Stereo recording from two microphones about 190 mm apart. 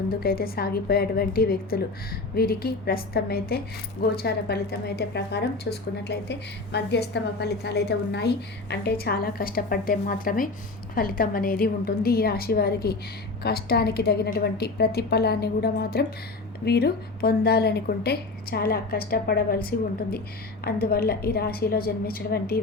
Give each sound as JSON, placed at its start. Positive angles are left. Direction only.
{"t": 0.1, "sound": "a woman's voice", "side_deg": 50}
{"t": 6.7, "sound": "a woman's voice", "side_deg": 65}
{"t": 20.8, "sound": "a woman's voice", "side_deg": 55}